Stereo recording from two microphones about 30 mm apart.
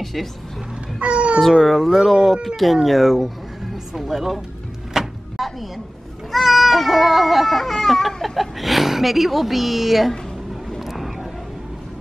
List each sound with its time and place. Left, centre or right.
0.0 s a woman's voice: centre
0.9 s speech: right
1.6 s a woman's voice: centre
4.9 s a sound: centre
5.4 s a sound: centre
6.3 s baby cry: centre
8.2 s a woman's voice: centre